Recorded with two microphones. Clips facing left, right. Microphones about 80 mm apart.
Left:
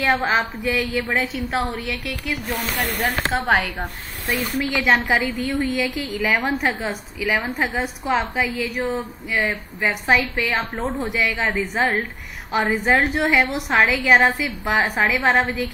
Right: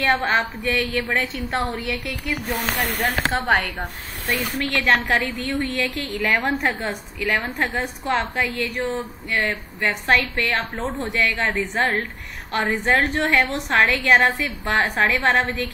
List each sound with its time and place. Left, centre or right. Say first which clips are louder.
0.2 s a woman's voice: left 1 dB; centre
0.8 s a woman's voice: left 1 dB; centre
7.2 s a woman's voice: left 1 dB; centre